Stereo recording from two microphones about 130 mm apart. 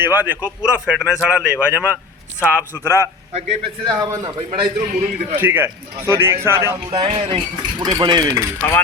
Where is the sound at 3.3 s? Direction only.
50° right (ahead or behind).